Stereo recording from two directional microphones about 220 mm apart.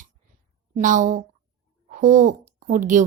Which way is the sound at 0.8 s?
35° right (ahead or behind).